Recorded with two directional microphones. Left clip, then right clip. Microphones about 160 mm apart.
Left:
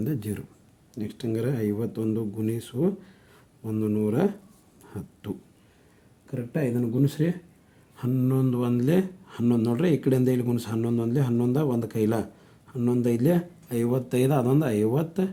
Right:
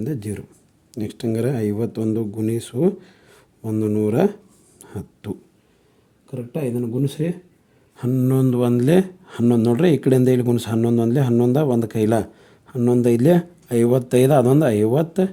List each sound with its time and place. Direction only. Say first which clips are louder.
0.0 s speech: right 4 dB; 25° right (ahead or behind)
0.9 s speech: right 6 dB; 55° right (ahead or behind)
4.8 s a sound: right 6 dB; 45° right (ahead or behind)
6.3 s speech: right 2 dB; 25° right (ahead or behind)
6.7 s speech: right 2 dB; 15° right (ahead or behind)
7.9 s speech: right 6 dB; 45° right (ahead or behind)